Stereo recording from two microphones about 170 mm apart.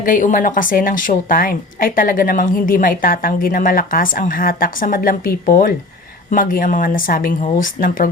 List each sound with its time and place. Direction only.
0.0 s a woman's voice: 50° left (ahead or behind)